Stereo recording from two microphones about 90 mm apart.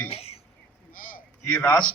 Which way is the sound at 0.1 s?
90° left.